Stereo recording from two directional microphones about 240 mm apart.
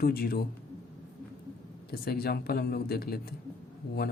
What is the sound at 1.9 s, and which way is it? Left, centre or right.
Speech, left.